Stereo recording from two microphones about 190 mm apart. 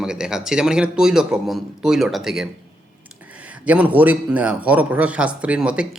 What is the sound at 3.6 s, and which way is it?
Speech, 5° right (ahead or behind).